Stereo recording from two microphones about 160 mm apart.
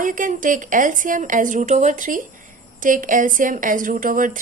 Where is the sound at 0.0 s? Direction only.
55° right (ahead or behind).